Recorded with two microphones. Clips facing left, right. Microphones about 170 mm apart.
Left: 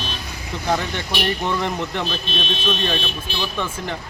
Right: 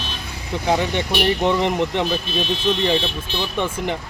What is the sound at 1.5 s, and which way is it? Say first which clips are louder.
Speech: right 5 dB; 20° right (ahead or behind).